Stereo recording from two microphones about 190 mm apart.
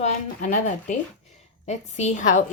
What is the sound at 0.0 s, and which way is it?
Speech, 40° left (ahead or behind).